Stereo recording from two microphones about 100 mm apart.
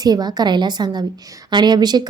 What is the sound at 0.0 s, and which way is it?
A woman's voice, 40° right (ahead or behind).